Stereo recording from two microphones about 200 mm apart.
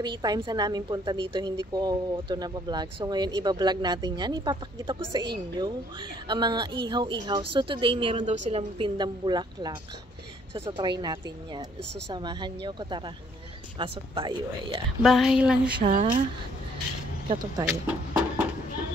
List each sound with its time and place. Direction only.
0.0 s a woman's voice: 20° right (ahead or behind)
15.0 s speech: centre (ahead or behind)
15.8 s speech: 40° right (ahead or behind)
17.3 s a woman's voice: 20° right (ahead or behind)
17.6 s speech: 5° right (ahead or behind)